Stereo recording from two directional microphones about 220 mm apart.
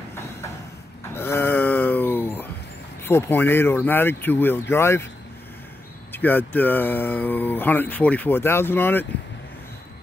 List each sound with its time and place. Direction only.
1.1 s a sound: 10° left (ahead or behind)
3.0 s speech: 10° left (ahead or behind)
6.1 s speech: 10° left (ahead or behind)